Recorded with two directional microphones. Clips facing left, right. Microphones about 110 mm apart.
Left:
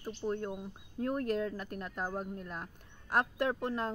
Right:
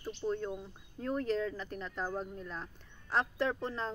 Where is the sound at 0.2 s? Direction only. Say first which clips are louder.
Even; 20° left (ahead or behind).